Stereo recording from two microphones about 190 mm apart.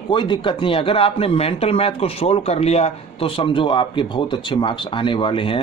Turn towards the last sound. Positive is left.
turn(degrees=25)  # may be behind; listen again after turning